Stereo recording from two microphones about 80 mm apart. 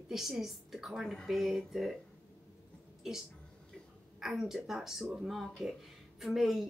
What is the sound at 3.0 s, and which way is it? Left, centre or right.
Speech, centre.